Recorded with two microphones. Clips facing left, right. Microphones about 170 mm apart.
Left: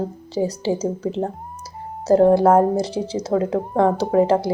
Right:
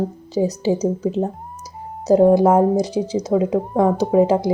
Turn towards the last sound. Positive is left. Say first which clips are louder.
# right 1 dB
turn(degrees=-15)  # may be behind; listen again after turning